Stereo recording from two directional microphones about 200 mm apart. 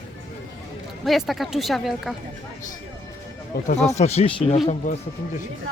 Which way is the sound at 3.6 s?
35° left (ahead or behind).